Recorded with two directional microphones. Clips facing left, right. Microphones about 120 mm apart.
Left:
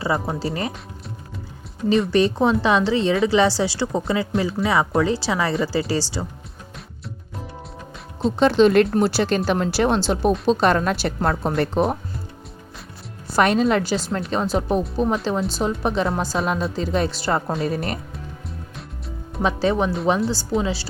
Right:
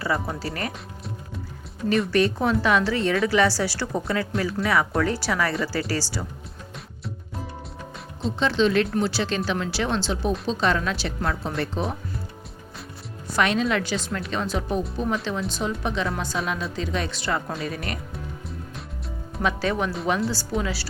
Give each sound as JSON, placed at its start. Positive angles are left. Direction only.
{"t": 0.0, "sound": "a woman's voice", "side_deg": 25}
{"t": 2.0, "sound": "a woman's voice", "side_deg": 25}
{"t": 8.4, "sound": "a woman's voice", "side_deg": 50}
{"t": 11.5, "sound": "speech", "side_deg": 55}
{"t": 13.3, "sound": "a woman's voice", "side_deg": 40}
{"t": 19.4, "sound": "a woman's voice", "side_deg": 30}